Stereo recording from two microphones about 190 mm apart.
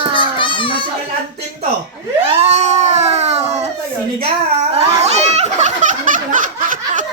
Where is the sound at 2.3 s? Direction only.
35° right (ahead or behind).